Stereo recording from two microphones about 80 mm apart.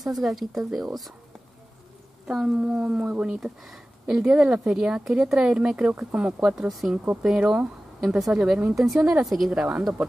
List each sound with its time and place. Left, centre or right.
0.0 s speech: centre
2.2 s speech: centre